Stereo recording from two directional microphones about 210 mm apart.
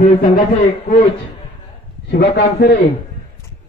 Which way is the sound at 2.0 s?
50° left (ahead or behind).